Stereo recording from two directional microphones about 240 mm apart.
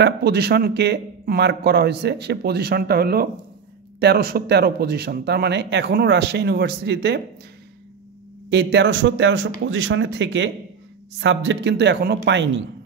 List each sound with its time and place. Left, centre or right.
0.0 s a man's voice: right
8.5 s a man's voice: right